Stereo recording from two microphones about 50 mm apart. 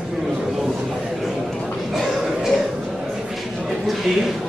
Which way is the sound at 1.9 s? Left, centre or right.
Centre.